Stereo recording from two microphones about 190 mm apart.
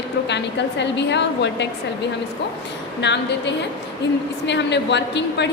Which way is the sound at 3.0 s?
65° left (ahead or behind).